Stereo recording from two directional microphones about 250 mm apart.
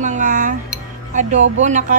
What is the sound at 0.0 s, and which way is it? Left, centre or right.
Music, right.